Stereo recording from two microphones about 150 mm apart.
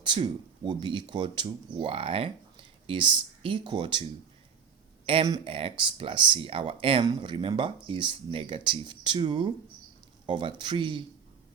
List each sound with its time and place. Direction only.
0.0 s speech: 35° right (ahead or behind)
5.0 s speech: 40° right (ahead or behind)